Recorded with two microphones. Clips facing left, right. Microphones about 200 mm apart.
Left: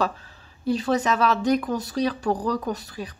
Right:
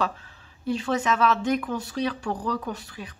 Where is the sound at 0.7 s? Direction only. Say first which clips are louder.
Left 3 dB; 40° left (ahead or behind).